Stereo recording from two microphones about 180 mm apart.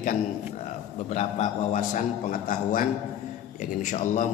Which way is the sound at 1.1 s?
40° left (ahead or behind).